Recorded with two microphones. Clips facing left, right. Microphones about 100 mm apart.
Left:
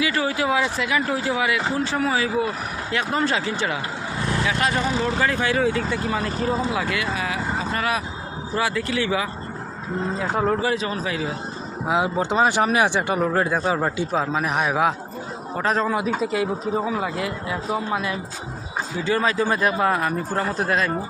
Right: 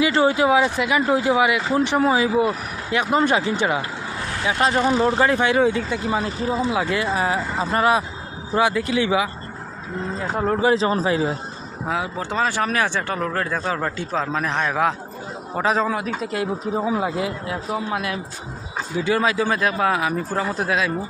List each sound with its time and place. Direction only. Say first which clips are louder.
0.0 s speech: right 5 dB; 25° right (ahead or behind)
6.9 s speech: right 4 dB; 30° right (ahead or behind); by 9.3 s 15° right (ahead or behind)
10.2 s speech: even; centre (ahead or behind)
10.6 s speech: right 5 dB; 25° right (ahead or behind)
11.9 s speech: left 4 dB; 20° left (ahead or behind)
15.5 s speech: right 1 dB; 5° right (ahead or behind)
16.8 s speech: right 2 dB; 15° right (ahead or behind)
17.5 s speech: even; 5° right (ahead or behind)
19.5 s speech: even; 5° left (ahead or behind)